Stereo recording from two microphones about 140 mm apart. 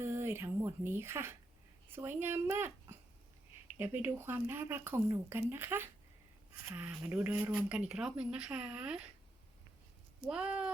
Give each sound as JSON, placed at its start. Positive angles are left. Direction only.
{"t": 0.0, "sound": "speech", "side_deg": -15}
{"t": 10.2, "sound": "speech", "side_deg": -5}